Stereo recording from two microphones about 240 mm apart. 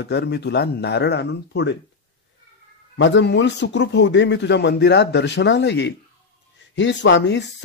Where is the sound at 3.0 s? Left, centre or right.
Left.